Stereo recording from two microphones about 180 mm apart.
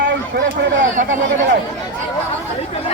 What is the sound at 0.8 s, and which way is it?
Speech, 45° right (ahead or behind).